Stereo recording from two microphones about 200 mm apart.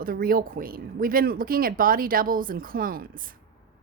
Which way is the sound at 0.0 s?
45° right (ahead or behind).